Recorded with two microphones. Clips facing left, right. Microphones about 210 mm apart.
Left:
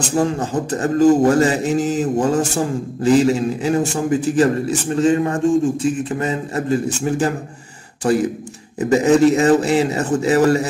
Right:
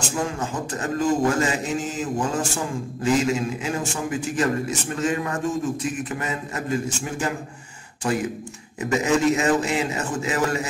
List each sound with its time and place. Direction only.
0.1 s a man's voice: 35° left (ahead or behind)